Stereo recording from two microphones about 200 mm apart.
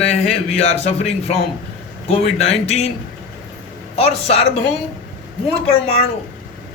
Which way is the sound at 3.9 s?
30° left (ahead or behind).